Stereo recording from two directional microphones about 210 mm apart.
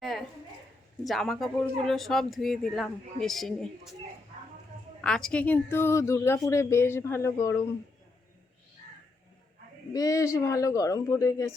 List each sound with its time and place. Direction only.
0.0 s a sound: centre (ahead or behind)
1.0 s speech: centre (ahead or behind)
5.0 s speech: 5° left (ahead or behind)
9.9 s speech: 15° left (ahead or behind)